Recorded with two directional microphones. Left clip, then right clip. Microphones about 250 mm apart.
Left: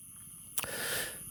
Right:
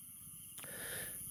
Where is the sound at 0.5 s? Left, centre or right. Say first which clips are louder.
Left 11 dB; left.